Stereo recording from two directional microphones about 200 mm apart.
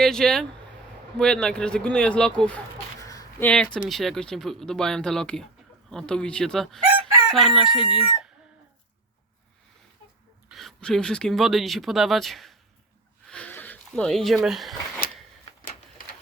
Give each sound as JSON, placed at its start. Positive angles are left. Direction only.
{"t": 0.0, "sound": "speech", "side_deg": 5}
{"t": 3.0, "sound": "a sound", "side_deg": 15}
{"t": 3.5, "sound": "speech", "side_deg": 5}
{"t": 7.0, "sound": "chicken", "side_deg": 0}
{"t": 10.5, "sound": "speech", "side_deg": 0}
{"t": 13.2, "sound": "a sound", "side_deg": 5}